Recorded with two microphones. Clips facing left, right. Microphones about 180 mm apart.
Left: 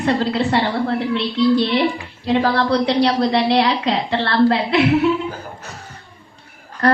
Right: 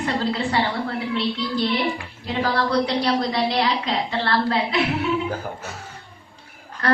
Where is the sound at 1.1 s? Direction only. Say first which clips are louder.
Left 9 dB; 65° left (ahead or behind).